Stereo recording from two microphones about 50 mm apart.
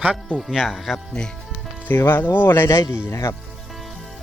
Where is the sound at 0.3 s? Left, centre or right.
Centre.